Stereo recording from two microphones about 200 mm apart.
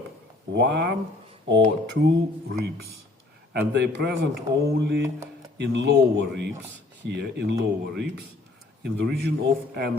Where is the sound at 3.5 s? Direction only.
60° right (ahead or behind).